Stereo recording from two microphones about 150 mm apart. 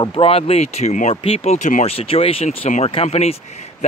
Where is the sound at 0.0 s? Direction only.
40° left (ahead or behind).